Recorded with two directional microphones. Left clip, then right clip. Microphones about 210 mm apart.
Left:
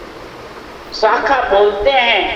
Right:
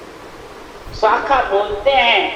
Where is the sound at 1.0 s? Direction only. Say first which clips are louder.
Left 1 dB; 45° left (ahead or behind).